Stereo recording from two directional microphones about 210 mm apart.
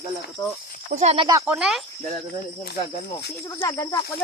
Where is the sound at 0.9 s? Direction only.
30° right (ahead or behind); by 1.8 s 5° right (ahead or behind).